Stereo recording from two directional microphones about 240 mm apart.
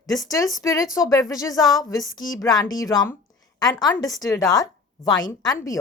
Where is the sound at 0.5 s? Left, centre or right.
Centre.